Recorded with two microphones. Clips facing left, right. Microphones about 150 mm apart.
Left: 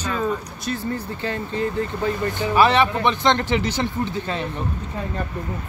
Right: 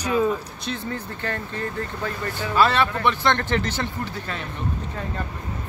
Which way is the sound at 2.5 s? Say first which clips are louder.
Left 3 dB; 15° left (ahead or behind).